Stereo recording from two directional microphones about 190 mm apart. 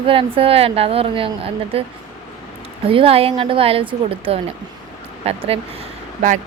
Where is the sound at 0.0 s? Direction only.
30° right (ahead or behind).